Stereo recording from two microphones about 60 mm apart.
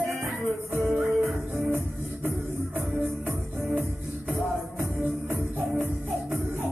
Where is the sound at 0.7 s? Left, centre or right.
Right.